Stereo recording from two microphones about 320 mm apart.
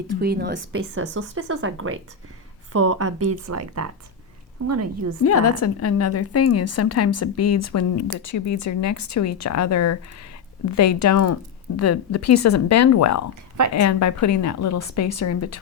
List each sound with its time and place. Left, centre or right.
0.2 s speech: right
5.2 s a woman's voice: left